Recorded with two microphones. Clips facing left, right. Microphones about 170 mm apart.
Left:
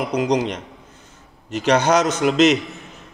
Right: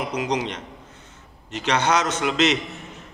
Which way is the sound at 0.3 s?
40° left (ahead or behind).